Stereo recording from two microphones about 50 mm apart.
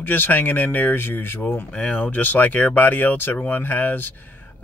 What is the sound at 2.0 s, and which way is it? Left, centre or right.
Speech, left.